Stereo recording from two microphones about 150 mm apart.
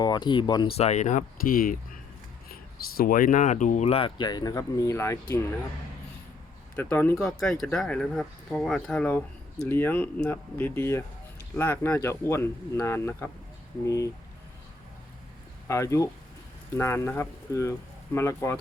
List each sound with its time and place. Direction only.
0.0 s speech: 30° left (ahead or behind)
0.8 s speech: 50° left (ahead or behind); by 1.7 s 70° left (ahead or behind)
2.5 s speech: 90° left; by 3.8 s 55° left (ahead or behind)
3.8 s speech: 40° left (ahead or behind); by 5.4 s 20° left (ahead or behind)
6.7 s speech: 15° left (ahead or behind)
7.3 s speech: 5° left (ahead or behind); by 14.1 s 20° left (ahead or behind)
15.6 s speech: 20° left (ahead or behind)